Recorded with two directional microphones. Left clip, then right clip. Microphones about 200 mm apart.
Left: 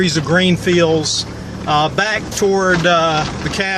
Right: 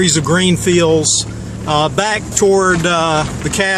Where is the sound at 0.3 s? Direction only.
40° right (ahead or behind).